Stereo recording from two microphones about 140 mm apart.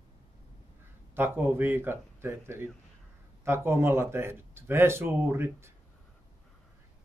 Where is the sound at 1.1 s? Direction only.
15° right (ahead or behind).